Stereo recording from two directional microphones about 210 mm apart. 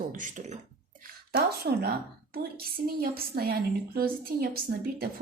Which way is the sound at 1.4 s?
50° right (ahead or behind).